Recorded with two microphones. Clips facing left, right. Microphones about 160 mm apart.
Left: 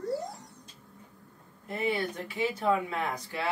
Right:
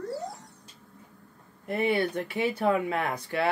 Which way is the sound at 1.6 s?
65° right (ahead or behind).